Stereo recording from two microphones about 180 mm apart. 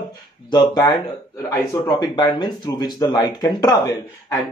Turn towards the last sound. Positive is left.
turn(degrees=20)  # may be behind; listen again after turning